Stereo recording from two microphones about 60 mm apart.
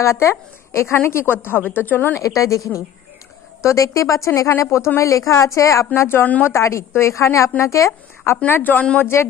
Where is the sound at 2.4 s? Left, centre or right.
Left.